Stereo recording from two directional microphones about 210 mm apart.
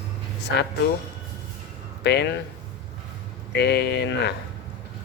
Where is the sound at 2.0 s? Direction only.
55° left (ahead or behind).